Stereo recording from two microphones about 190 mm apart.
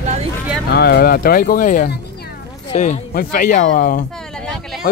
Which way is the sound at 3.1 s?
50° left (ahead or behind).